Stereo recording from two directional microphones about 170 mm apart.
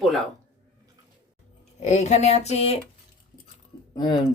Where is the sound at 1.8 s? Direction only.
45° left (ahead or behind).